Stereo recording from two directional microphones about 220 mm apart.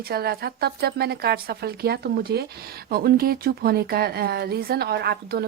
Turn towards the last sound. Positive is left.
turn(degrees=-45)  # may be behind; listen again after turning